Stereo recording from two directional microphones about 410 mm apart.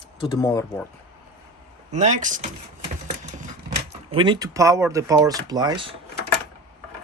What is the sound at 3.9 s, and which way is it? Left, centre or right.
Speech, centre.